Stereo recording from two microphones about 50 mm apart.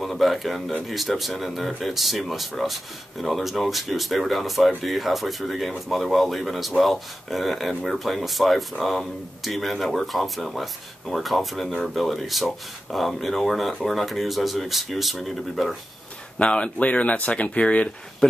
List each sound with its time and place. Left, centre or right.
0.0 s speech: centre
16.3 s speech: left